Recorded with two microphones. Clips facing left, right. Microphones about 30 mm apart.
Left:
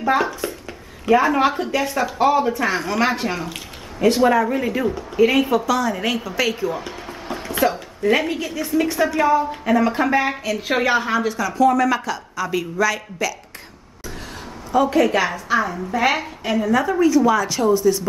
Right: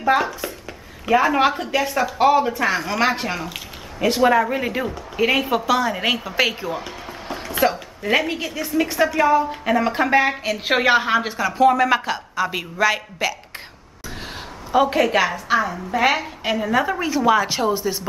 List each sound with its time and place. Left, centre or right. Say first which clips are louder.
0.0 s a woman's voice: even; centre
6.8 s music: left 1 dB; centre
7.7 s a woman's voice: left 2 dB; centre
10.6 s a woman's voice: right 2 dB; right
14.7 s speech: right 1 dB; right
15.0 s a woman's voice: left 1 dB; centre
16.5 s a woman's voice: left 3 dB; centre